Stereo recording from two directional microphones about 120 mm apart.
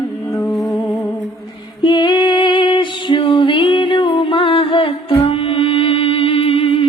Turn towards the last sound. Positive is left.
turn(degrees=50)  # may be behind; listen again after turning